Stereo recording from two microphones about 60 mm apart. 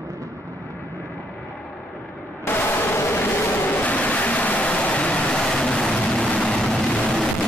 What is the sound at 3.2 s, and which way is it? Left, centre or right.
Vehicle, left.